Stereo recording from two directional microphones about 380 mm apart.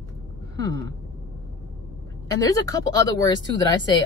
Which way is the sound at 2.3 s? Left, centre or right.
Centre.